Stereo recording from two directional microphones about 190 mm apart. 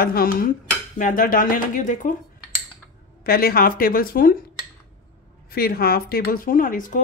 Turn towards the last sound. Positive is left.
turn(degrees=45)  # may be behind; listen again after turning